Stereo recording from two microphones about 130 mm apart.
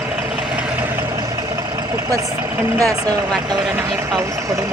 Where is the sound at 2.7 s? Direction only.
25° right (ahead or behind).